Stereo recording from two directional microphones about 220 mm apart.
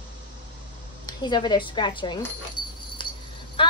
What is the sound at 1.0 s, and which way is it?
A woman's voice, 20° left (ahead or behind).